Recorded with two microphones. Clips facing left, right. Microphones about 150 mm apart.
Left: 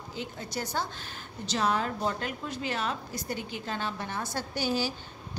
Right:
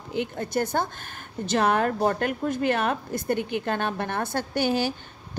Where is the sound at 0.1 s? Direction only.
60° right (ahead or behind).